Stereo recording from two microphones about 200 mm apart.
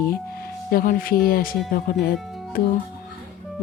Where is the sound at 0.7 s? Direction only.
45° left (ahead or behind).